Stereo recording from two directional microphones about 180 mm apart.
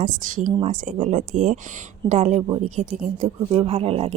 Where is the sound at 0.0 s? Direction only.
45° right (ahead or behind).